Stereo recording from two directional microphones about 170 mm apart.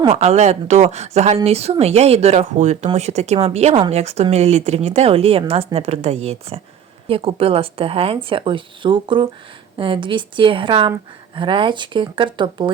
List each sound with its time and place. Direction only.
0.0 s speech: 35° right (ahead or behind)